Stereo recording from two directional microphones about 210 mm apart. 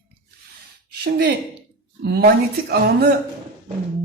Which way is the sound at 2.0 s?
45° right (ahead or behind).